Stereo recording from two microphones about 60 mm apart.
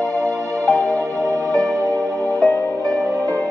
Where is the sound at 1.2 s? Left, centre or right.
Right.